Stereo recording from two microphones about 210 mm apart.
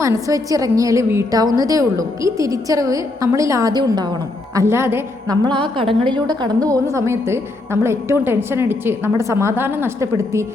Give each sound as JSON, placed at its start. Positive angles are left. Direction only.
{"t": 0.0, "sound": "a woman's voice", "side_deg": -15}
{"t": 5.5, "sound": "a woman's voice", "side_deg": -25}